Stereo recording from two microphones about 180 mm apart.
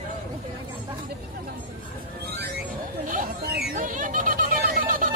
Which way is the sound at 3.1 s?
55° right (ahead or behind).